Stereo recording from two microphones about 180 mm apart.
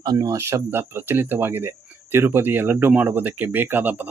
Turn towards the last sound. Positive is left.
turn(degrees=-10)  # may be behind; listen again after turning